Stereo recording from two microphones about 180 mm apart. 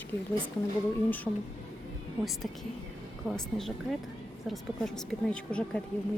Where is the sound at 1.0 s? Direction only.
10° left (ahead or behind).